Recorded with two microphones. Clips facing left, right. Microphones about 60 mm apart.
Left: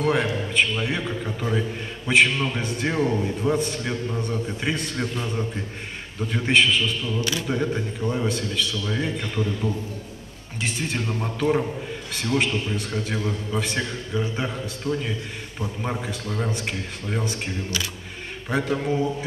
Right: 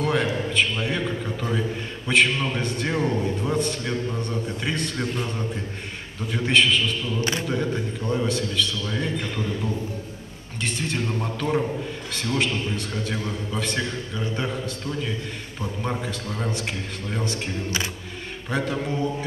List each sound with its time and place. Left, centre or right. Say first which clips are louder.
0.0 s a man's voice: left 1 dB; centre
18.5 s a man's voice: left 2 dB; centre